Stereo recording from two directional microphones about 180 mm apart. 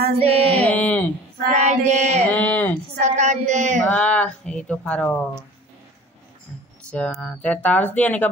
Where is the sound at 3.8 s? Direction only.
5° left (ahead or behind).